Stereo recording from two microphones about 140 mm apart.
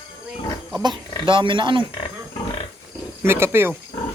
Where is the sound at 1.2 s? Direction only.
35° right (ahead or behind).